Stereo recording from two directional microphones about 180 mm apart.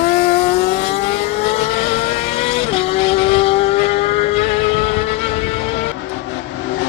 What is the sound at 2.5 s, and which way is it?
Vehicle, 35° left (ahead or behind).